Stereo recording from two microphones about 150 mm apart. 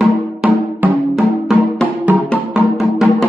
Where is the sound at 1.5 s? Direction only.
Centre (ahead or behind).